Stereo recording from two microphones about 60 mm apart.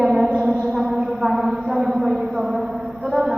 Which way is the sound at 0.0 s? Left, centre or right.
Centre.